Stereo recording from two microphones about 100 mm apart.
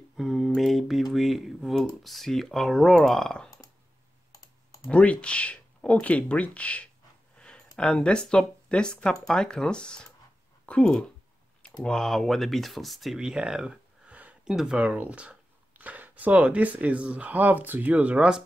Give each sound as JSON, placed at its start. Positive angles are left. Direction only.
{"t": 0.2, "sound": "mantra", "side_deg": 0}
{"t": 0.6, "sound": "speech", "side_deg": 0}
{"t": 4.9, "sound": "speech", "side_deg": 15}
{"t": 14.8, "sound": "speech", "side_deg": -15}